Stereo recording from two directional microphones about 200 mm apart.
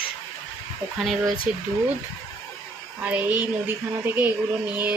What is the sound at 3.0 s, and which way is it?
Speech, 10° right (ahead or behind).